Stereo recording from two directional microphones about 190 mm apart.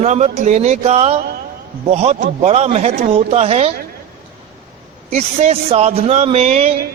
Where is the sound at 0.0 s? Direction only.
35° right (ahead or behind).